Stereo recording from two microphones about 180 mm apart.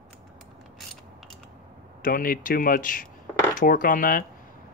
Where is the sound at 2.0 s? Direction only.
50° left (ahead or behind).